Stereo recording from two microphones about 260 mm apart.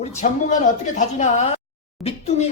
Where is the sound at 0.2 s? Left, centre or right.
Left.